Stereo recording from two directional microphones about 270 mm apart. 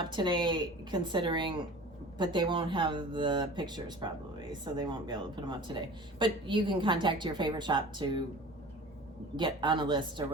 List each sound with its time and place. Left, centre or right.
0.1 s speech: centre
9.3 s speech: centre